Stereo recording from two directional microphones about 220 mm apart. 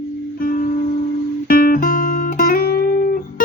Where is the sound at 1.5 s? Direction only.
40° left (ahead or behind).